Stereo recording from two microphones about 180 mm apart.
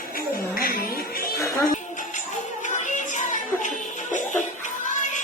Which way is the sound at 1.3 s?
15° left (ahead or behind).